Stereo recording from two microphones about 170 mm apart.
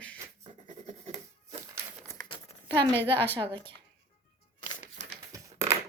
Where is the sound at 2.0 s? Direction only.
10° left (ahead or behind).